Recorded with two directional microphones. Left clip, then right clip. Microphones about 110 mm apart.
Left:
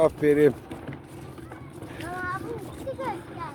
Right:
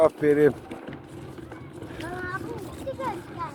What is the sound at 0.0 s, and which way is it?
Speech, 30° left (ahead or behind).